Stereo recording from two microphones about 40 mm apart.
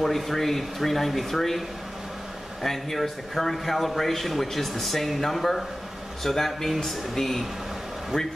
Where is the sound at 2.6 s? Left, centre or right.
Centre.